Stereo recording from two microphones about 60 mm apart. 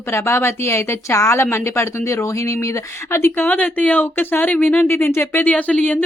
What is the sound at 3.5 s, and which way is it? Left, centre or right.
Speech, left.